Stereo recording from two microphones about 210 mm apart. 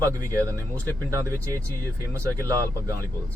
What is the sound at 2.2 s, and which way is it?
Speech, 15° right (ahead or behind).